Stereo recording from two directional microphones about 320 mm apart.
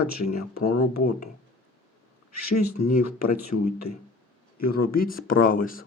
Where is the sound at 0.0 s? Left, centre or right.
Left.